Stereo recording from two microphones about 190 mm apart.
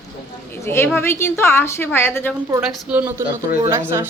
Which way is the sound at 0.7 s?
10° left (ahead or behind).